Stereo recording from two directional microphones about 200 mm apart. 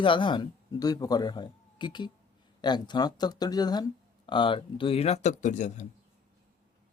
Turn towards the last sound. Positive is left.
turn(degrees=35)  # may be behind; listen again after turning